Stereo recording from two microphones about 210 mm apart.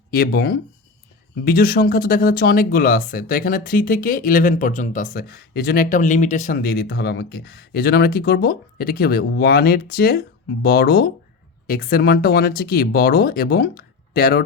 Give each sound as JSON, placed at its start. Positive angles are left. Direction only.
{"t": 0.1, "sound": "speech", "side_deg": 45}